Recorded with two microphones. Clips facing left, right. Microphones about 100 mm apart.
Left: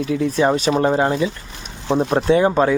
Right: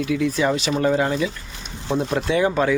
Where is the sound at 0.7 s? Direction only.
30° left (ahead or behind).